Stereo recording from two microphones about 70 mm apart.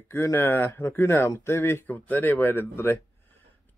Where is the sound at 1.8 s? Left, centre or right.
Left.